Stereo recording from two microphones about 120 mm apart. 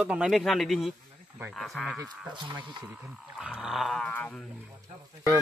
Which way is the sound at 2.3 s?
40° right (ahead or behind).